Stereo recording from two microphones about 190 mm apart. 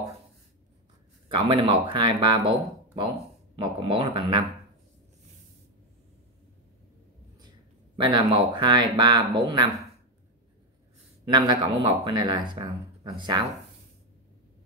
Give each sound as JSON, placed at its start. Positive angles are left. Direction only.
{"t": 1.3, "sound": "speech", "side_deg": -25}
{"t": 3.5, "sound": "speech", "side_deg": -25}
{"t": 7.9, "sound": "speech", "side_deg": -25}
{"t": 11.3, "sound": "speech", "side_deg": -25}